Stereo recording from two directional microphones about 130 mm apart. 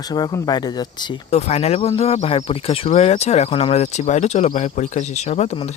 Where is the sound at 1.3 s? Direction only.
55° left (ahead or behind).